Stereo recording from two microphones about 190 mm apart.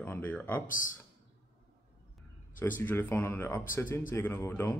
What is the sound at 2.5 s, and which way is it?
Speech, 10° left (ahead or behind).